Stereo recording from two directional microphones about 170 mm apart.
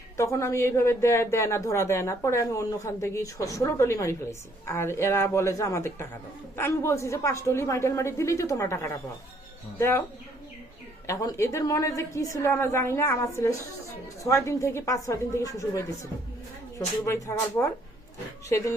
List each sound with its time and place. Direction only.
0.2 s speech: 15° left (ahead or behind)
11.0 s speech: 20° left (ahead or behind)